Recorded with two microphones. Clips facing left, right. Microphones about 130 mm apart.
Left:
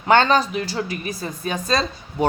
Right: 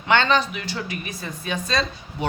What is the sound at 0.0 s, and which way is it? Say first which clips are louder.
A woman's voice: left 4 dB; 40° left (ahead or behind).